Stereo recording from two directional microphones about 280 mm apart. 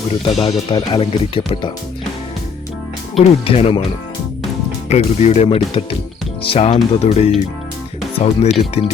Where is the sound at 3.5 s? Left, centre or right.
Left.